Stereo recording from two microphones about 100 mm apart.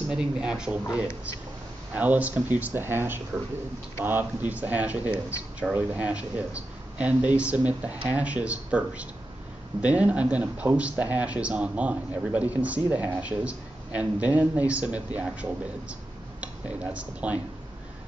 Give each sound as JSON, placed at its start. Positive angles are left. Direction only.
{"t": 0.1, "sound": "speech", "side_deg": -10}